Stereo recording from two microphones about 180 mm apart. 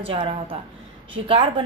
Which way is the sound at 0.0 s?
30° right (ahead or behind).